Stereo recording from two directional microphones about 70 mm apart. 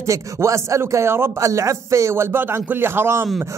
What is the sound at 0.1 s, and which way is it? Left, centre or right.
A man's voice, right.